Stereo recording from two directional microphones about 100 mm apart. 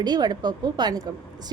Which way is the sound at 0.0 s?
45° right (ahead or behind).